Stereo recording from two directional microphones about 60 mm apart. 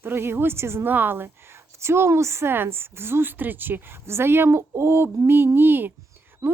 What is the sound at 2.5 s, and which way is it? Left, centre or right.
A woman's voice, right.